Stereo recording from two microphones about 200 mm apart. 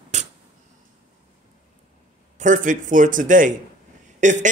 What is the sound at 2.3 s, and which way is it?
A man's voice, 40° right (ahead or behind).